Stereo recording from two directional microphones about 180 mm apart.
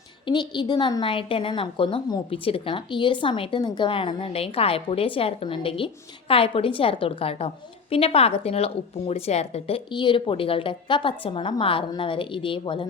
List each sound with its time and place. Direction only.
0.3 s a woman's voice: 25° left (ahead or behind)